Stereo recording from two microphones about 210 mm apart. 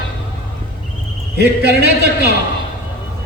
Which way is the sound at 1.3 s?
50° right (ahead or behind).